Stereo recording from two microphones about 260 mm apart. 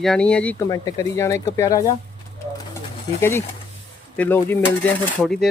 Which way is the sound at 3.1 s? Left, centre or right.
Centre.